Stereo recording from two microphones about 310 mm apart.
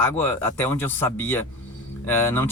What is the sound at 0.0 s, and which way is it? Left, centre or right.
Speech, centre.